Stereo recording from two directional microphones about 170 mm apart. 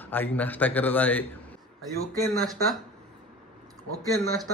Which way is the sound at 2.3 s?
Centre (ahead or behind).